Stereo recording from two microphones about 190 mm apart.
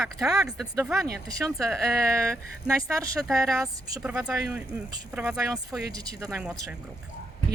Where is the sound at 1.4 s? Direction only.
15° right (ahead or behind).